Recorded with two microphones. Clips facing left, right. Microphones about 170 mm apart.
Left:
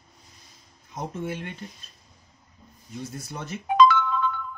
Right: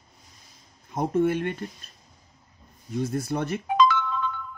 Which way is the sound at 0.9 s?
55° right (ahead or behind).